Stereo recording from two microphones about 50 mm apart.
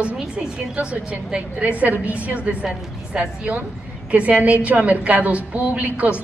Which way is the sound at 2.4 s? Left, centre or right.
Centre.